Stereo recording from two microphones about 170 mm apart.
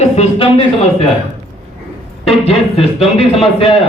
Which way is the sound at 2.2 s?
35° left (ahead or behind).